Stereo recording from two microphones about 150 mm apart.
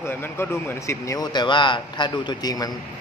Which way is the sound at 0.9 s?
20° left (ahead or behind).